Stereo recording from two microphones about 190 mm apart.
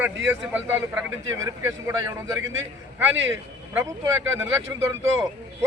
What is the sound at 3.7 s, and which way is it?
Speech, 10° right (ahead or behind).